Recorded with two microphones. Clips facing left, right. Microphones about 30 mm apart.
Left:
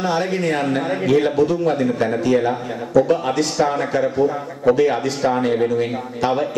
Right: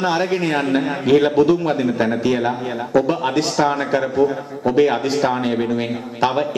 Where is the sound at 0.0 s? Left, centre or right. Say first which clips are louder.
Right 1 dB; right.